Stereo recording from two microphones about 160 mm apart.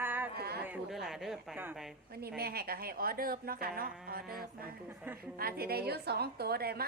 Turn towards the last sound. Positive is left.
turn(degrees=-75)  # may be behind; listen again after turning